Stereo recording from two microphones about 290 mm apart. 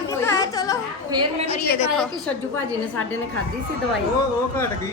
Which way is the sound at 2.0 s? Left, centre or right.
Centre.